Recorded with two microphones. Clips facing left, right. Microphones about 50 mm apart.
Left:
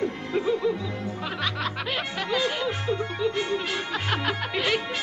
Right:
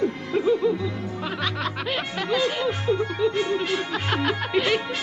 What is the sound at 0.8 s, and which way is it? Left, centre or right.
Music, left.